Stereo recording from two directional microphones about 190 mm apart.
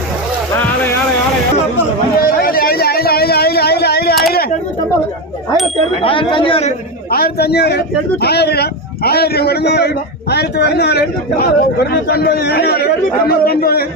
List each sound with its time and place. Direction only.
2.1 s a sound: 50° left (ahead or behind)
6.0 s speech: 25° left (ahead or behind)
7.1 s a man's voice: 55° left (ahead or behind)